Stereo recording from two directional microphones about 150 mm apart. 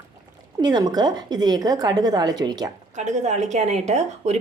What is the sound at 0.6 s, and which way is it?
A woman's voice, 25° right (ahead or behind).